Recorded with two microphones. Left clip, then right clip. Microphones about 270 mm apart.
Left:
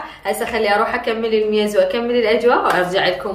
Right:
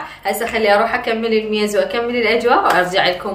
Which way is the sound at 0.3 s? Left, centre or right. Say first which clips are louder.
Right 2 dB; centre.